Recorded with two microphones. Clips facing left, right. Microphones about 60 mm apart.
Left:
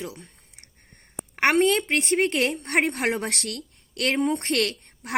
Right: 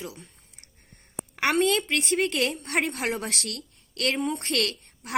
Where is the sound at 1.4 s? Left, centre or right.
Left.